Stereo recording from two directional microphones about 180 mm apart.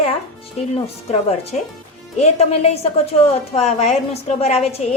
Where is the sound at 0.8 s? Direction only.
35° left (ahead or behind).